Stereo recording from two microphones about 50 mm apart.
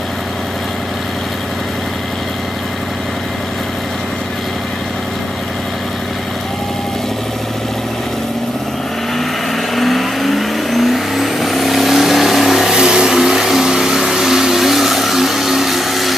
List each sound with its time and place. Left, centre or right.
9.8 s vehicle: centre